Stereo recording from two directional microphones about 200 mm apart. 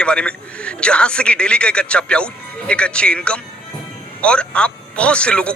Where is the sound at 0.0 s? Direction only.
5° left (ahead or behind).